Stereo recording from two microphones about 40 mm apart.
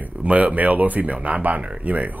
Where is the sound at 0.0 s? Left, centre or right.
Right.